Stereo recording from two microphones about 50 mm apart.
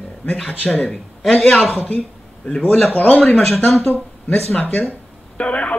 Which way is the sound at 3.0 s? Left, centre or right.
Left.